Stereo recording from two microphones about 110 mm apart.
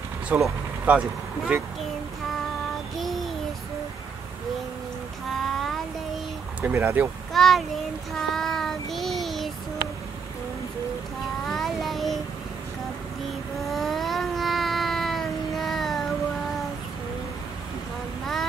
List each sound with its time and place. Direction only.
0.3 s speech: 10° right (ahead or behind)
3.0 s child singing: centre (ahead or behind)
5.3 s child singing: centre (ahead or behind)
6.6 s speech: 20° right (ahead or behind)
7.3 s a child's voice: centre (ahead or behind)
8.1 s child singing: 5° left (ahead or behind)
11.4 s child singing: centre (ahead or behind)
13.7 s a sound: centre (ahead or behind)
18.2 s a sound: centre (ahead or behind)